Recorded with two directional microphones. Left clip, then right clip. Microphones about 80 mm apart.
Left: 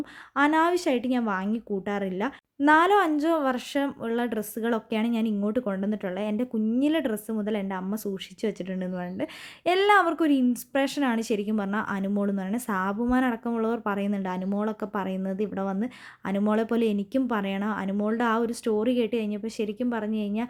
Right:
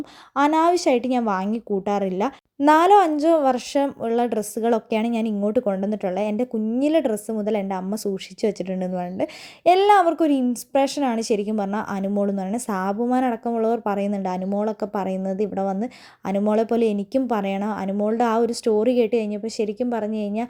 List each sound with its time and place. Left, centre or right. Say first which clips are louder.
0.3 s a woman's voice: right 4 dB; right
2.9 s a woman's voice: right 7 dB; right
9.6 s a woman's voice: right 6 dB; right